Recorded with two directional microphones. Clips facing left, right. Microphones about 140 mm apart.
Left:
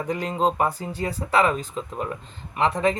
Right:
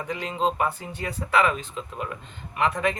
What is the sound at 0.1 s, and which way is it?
Speech, 40° left (ahead or behind).